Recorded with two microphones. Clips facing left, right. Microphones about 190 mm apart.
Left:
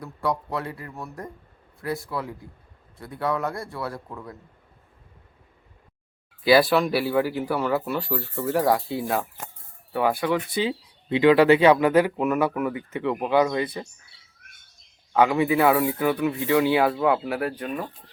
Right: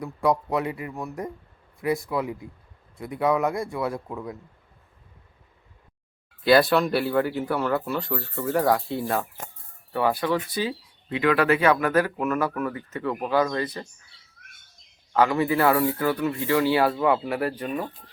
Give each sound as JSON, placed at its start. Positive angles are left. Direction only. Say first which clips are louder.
{"t": 0.0, "sound": "a man's voice", "louder": "right 4 dB", "side_deg": -20}
{"t": 6.4, "sound": "speech", "louder": "even", "side_deg": 0}
{"t": 10.5, "sound": "speech", "louder": "left 2 dB", "side_deg": 25}
{"t": 15.3, "sound": "speech", "louder": "left 1 dB", "side_deg": 5}